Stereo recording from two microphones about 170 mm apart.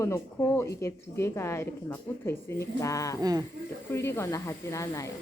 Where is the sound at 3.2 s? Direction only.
20° right (ahead or behind).